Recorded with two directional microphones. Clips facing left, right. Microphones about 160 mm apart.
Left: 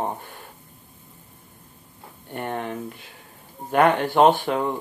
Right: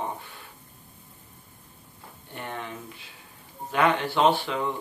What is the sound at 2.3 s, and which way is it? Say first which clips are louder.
Speech: left 7 dB; 50° left (ahead or behind).